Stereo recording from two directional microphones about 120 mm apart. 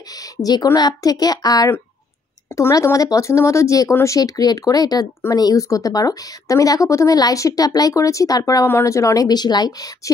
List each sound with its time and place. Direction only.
0.1 s speech: 30° left (ahead or behind)